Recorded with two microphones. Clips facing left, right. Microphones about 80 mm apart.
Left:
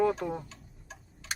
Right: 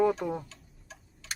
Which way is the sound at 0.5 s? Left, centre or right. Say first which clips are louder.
Left 2 dB; centre.